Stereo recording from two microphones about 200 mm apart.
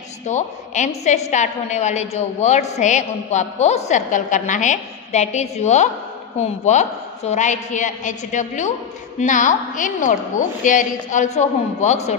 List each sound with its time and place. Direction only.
0.3 s a woman's voice: 35° left (ahead or behind)